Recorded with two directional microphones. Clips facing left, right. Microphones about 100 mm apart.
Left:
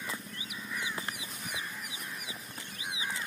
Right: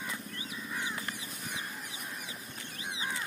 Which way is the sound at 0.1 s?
20° left (ahead or behind).